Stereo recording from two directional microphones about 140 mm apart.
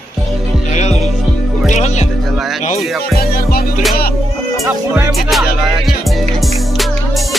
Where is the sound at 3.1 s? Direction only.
90° left.